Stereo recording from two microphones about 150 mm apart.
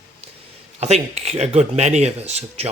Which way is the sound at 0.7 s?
45° right (ahead or behind).